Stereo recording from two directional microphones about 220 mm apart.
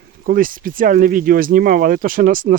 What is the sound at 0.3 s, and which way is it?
Speech, 40° right (ahead or behind).